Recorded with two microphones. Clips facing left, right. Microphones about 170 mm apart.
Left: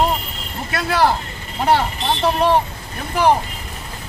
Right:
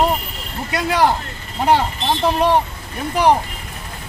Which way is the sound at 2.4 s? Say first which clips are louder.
Even; 15° right (ahead or behind).